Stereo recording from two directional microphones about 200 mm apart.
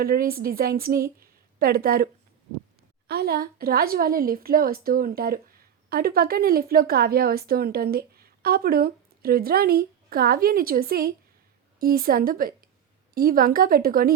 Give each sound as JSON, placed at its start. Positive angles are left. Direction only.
{"t": 0.0, "sound": "a woman's voice", "side_deg": -45}
{"t": 3.1, "sound": "a woman's voice", "side_deg": -50}